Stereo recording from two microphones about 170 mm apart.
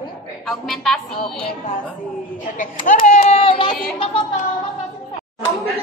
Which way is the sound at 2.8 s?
45° left (ahead or behind).